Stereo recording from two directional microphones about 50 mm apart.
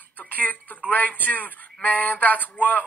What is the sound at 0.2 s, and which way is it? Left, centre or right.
Speech, left.